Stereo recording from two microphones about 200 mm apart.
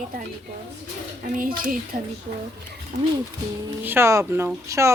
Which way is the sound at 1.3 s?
45° right (ahead or behind).